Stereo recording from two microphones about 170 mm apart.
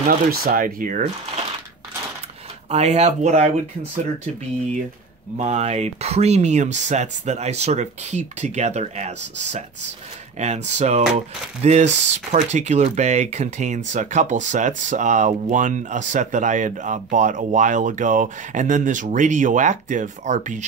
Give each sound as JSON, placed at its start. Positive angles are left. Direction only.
{"t": 0.3, "sound": "speech", "side_deg": -60}
{"t": 2.7, "sound": "speech", "side_deg": -40}
{"t": 5.4, "sound": "speech", "side_deg": -40}